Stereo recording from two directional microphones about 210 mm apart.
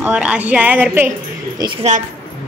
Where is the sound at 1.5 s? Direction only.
20° right (ahead or behind).